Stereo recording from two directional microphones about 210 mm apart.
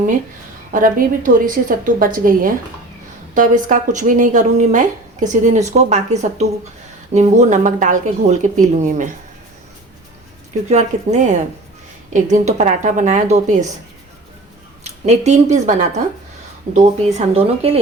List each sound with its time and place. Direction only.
0.7 s speech: 40° right (ahead or behind)
10.7 s speech: 35° right (ahead or behind)
14.8 s speech: 35° right (ahead or behind)